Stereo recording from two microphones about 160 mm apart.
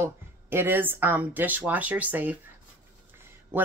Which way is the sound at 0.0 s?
15° right (ahead or behind).